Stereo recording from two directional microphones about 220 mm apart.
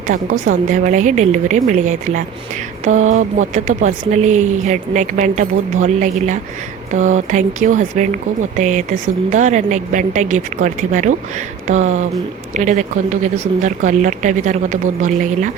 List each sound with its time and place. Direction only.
0.1 s speech: 35° right (ahead or behind)